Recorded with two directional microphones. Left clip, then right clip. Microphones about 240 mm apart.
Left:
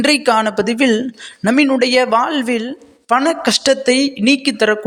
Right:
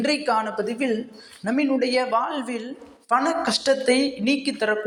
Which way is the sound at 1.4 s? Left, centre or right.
Left.